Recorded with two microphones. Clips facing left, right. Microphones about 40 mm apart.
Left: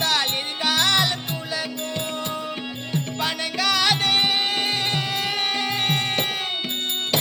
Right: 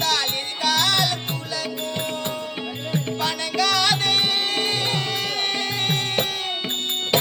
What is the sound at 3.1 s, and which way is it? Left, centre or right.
Music, centre.